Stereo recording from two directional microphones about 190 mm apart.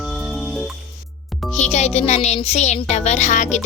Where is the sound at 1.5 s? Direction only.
35° left (ahead or behind).